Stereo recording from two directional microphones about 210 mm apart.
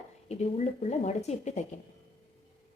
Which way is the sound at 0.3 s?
30° left (ahead or behind).